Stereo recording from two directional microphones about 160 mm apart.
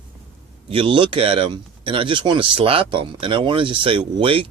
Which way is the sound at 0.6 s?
35° right (ahead or behind).